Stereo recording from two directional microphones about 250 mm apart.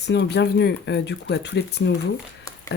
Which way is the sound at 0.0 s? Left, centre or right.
Left.